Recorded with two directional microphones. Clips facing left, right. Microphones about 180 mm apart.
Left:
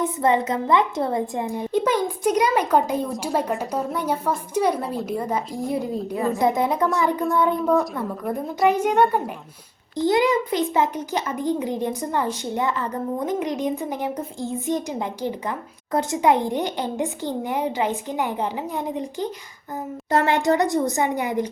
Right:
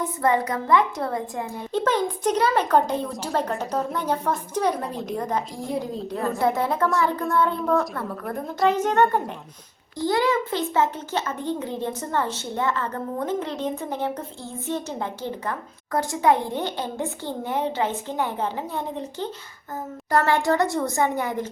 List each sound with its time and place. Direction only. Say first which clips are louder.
0.0 s a woman's voice: left 2 dB; 20° left (ahead or behind); by 6.4 s 5° left (ahead or behind)
6.4 s a woman's voice: left 1 dB; 15° left (ahead or behind)